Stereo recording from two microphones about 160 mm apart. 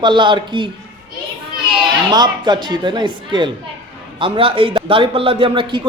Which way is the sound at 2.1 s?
25° right (ahead or behind).